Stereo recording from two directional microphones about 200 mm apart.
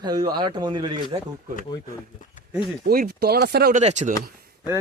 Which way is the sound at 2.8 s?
50° right (ahead or behind).